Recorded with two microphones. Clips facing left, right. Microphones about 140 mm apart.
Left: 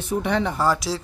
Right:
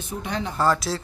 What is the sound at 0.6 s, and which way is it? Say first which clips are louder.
Speech: even; 10° left (ahead or behind).